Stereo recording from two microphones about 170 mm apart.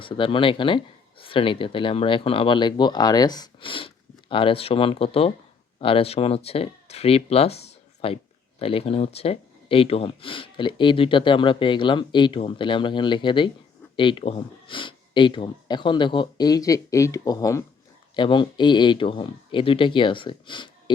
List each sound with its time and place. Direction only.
0.0 s speech: 30° left (ahead or behind)